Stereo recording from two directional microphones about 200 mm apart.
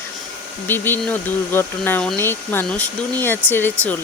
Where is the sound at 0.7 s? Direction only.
10° left (ahead or behind).